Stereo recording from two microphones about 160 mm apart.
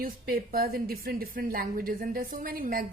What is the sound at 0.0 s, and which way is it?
A woman's voice, 65° right (ahead or behind).